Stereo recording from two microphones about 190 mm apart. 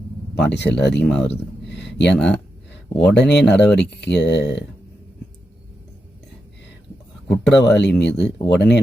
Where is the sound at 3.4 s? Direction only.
5° left (ahead or behind).